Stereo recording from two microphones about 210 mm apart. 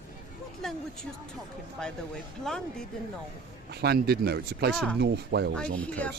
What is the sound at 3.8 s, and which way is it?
Speech, 50° right (ahead or behind).